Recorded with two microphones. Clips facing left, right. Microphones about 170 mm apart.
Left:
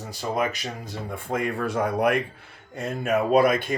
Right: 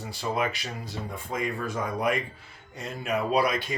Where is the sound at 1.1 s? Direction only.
60° left (ahead or behind).